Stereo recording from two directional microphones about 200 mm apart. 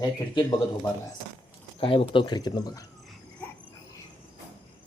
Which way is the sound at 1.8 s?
25° left (ahead or behind).